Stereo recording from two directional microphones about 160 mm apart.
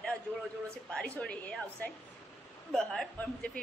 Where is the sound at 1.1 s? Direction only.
5° left (ahead or behind).